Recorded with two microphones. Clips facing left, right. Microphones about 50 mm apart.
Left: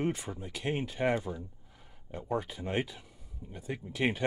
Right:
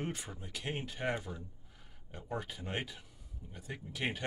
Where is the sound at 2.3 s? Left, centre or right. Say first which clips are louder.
Left 6 dB; left.